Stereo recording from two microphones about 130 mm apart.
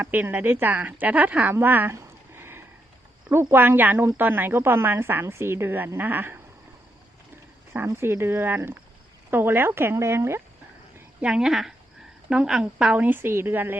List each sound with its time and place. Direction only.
0.0 s a woman's voice: 15° right (ahead or behind)
7.7 s a woman's voice: 20° right (ahead or behind)
11.2 s a woman's voice: 5° right (ahead or behind)